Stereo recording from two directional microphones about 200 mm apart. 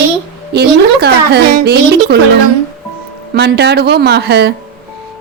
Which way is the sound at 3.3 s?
55° right (ahead or behind).